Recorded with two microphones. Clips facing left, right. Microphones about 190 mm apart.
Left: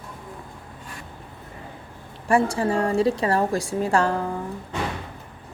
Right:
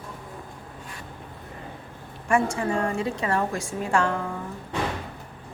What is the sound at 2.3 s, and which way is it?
A woman's voice, 35° left (ahead or behind).